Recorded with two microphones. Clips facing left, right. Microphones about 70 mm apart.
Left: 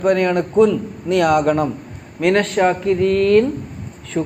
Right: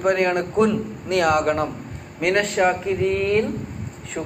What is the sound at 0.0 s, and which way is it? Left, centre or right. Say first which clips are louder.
A man's voice: left 3 dB; centre.